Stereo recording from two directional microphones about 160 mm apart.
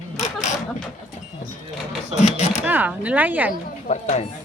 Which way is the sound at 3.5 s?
50° left (ahead or behind).